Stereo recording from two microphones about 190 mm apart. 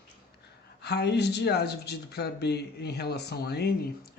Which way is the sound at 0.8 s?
60° left (ahead or behind).